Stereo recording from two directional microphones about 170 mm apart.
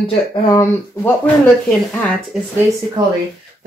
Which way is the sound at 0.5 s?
15° left (ahead or behind).